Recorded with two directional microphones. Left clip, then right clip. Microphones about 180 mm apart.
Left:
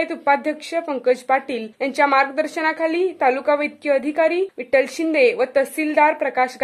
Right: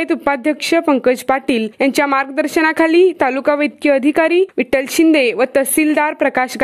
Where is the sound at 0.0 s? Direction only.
45° right (ahead or behind).